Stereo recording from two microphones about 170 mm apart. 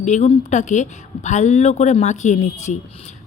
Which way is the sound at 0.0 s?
45° left (ahead or behind).